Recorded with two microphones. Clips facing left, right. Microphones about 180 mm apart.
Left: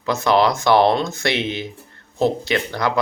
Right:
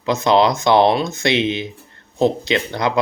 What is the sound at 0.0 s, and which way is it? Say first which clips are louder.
Speech: right 2 dB; 20° right (ahead or behind).